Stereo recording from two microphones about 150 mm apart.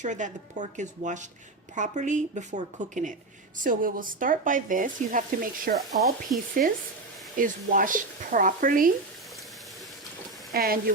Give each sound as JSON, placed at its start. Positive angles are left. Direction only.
{"t": 0.0, "sound": "speech", "side_deg": -55}
{"t": 10.5, "sound": "speech", "side_deg": -80}